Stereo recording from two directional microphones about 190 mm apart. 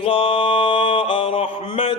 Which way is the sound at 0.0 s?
30° left (ahead or behind).